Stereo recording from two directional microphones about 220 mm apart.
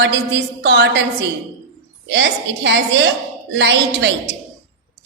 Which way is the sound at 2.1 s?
50° right (ahead or behind).